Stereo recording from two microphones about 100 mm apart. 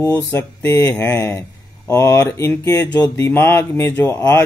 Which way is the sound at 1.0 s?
25° left (ahead or behind).